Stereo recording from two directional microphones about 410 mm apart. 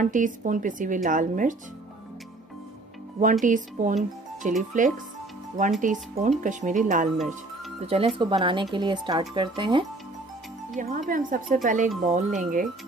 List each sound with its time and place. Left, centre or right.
0.0 s a woman's voice: centre
3.4 s a woman's voice: centre